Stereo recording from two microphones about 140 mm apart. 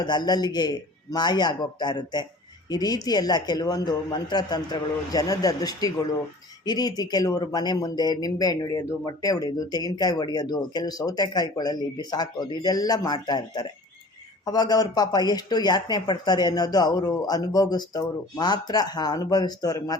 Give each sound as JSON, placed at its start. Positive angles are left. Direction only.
{"t": 0.0, "sound": "a man's voice", "side_deg": 30}